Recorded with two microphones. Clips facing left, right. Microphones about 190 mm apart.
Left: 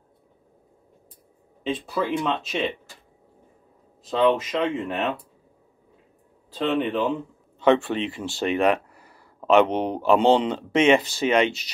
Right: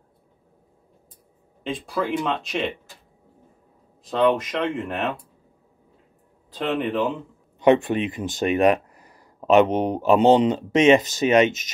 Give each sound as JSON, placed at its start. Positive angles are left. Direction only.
{"t": 1.6, "sound": "speech", "side_deg": 0}
{"t": 4.0, "sound": "speech", "side_deg": 0}
{"t": 6.5, "sound": "speech", "side_deg": 0}
{"t": 7.5, "sound": "speech", "side_deg": -15}